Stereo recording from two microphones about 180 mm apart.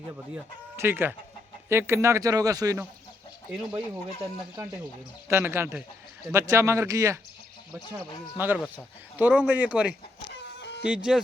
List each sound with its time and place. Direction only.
0.8 s speech: 10° right (ahead or behind)
4.2 s speech: 15° right (ahead or behind)
8.4 s speech: 10° right (ahead or behind)
10.6 s a sound: 75° left (ahead or behind)
10.8 s speech: 5° right (ahead or behind)